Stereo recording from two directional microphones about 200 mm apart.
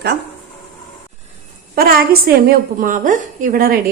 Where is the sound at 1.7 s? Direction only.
50° right (ahead or behind).